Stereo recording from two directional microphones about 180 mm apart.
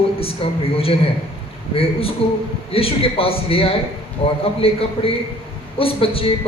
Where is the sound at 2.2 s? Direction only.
30° left (ahead or behind).